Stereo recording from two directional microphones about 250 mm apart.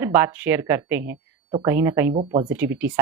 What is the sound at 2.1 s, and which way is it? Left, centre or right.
Speech, right.